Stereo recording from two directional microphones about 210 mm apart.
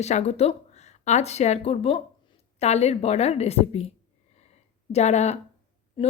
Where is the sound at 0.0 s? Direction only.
30° left (ahead or behind).